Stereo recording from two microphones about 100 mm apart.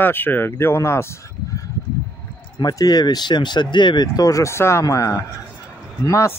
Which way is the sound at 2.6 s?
40° left (ahead or behind).